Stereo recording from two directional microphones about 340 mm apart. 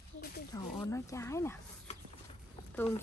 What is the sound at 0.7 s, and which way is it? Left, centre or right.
Speech, centre.